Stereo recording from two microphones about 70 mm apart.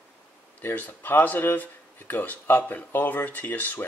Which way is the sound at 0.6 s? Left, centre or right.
Left.